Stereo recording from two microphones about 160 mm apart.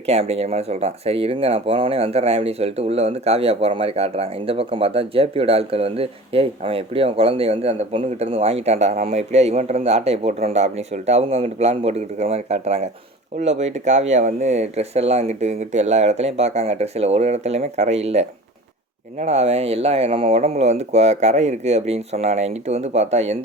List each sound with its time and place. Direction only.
0.0 s speech: 40° right (ahead or behind)